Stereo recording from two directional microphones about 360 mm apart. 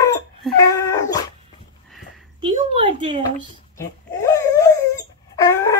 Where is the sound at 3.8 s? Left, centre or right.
Centre.